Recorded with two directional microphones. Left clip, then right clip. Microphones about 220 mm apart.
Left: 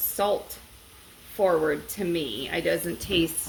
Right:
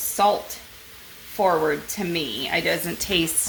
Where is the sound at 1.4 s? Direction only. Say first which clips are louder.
Right 2 dB; 35° right (ahead or behind).